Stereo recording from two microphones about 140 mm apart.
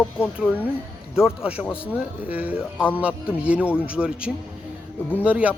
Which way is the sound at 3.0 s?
10° right (ahead or behind).